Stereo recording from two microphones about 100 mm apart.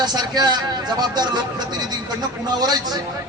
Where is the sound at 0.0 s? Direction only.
45° right (ahead or behind).